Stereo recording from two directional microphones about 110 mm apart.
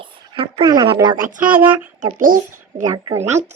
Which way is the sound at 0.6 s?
35° right (ahead or behind).